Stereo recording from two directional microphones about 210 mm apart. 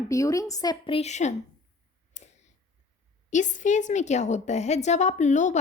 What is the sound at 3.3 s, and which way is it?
A woman's voice, 35° left (ahead or behind).